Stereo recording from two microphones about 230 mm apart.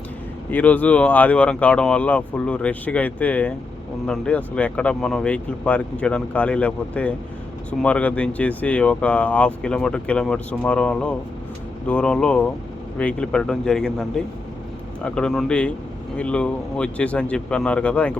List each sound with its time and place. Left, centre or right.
0.5 s speech: centre